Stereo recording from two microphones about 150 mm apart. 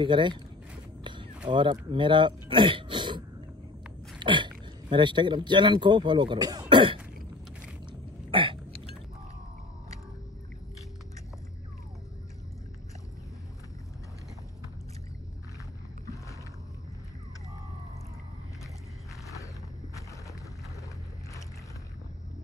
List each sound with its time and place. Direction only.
0.0 s speech: 30° right (ahead or behind)
1.0 s walk: 30° right (ahead or behind)
1.5 s speech: 30° right (ahead or behind)
4.2 s a sound: 30° right (ahead or behind)
4.9 s speech: 30° right (ahead or behind)
6.7 s throat clearing: 35° right (ahead or behind)
8.3 s hiccup: 35° right (ahead or behind)